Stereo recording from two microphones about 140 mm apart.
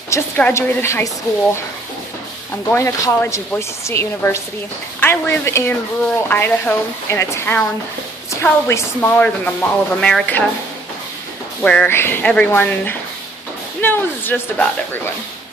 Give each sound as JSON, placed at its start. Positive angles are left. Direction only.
{"t": 0.4, "sound": "a woman's voice", "side_deg": 15}
{"t": 2.7, "sound": "speech", "side_deg": 15}
{"t": 8.6, "sound": "speech", "side_deg": 15}
{"t": 11.6, "sound": "speech", "side_deg": 10}